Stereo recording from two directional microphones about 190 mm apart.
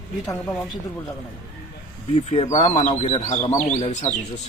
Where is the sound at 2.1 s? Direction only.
30° left (ahead or behind).